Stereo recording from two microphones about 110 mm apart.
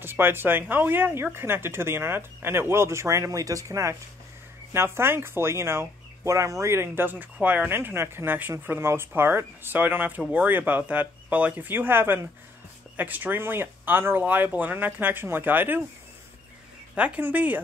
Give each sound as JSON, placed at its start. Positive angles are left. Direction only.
{"t": 0.0, "sound": "speech", "side_deg": -20}
{"t": 16.9, "sound": "speech", "side_deg": -10}